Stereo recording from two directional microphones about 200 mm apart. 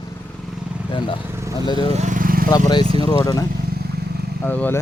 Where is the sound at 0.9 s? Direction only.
25° left (ahead or behind).